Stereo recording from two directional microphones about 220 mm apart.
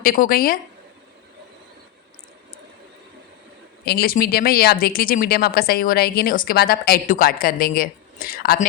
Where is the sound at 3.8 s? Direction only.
45° left (ahead or behind).